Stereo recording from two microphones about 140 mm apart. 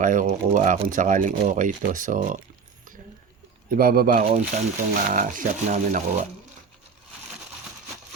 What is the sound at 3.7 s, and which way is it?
Speech, 90° right.